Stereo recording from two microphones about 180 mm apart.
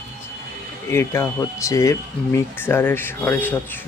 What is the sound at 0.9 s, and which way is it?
Speech, 15° left (ahead or behind).